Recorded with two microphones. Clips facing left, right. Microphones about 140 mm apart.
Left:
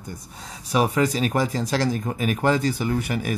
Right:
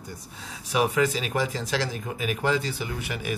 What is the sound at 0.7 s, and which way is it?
Speech, 40° left (ahead or behind).